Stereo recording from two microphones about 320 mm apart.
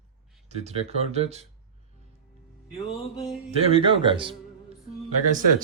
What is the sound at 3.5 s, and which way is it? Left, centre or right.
Speech, centre.